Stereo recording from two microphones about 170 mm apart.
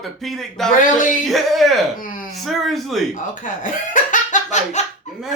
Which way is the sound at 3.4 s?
50° left (ahead or behind).